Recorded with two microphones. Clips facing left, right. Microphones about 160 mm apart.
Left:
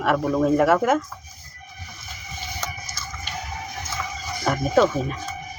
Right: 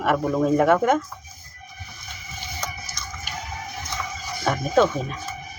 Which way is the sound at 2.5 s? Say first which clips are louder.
Right 1 dB; centre (ahead or behind).